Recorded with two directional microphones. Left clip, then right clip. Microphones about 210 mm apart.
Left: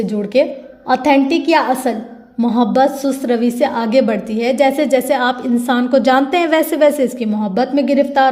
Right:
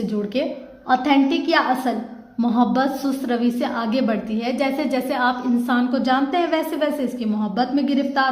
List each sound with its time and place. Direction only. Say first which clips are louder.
0.9 s a woman's voice: left 5 dB; 35° left (ahead or behind)